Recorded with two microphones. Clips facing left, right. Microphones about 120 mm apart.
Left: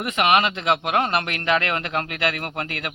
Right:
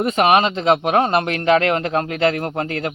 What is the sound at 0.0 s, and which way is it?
A man's voice, 30° right (ahead or behind).